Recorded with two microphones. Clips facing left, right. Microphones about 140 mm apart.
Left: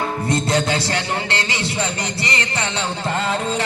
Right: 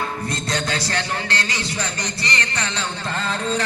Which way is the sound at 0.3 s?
30° left (ahead or behind).